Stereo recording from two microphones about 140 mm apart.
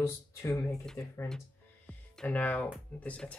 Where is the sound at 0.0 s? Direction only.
20° left (ahead or behind).